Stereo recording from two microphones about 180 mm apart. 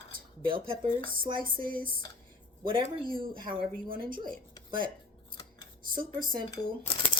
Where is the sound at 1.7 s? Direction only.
50° right (ahead or behind).